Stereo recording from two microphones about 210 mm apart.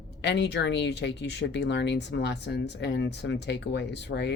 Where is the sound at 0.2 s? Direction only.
55° left (ahead or behind).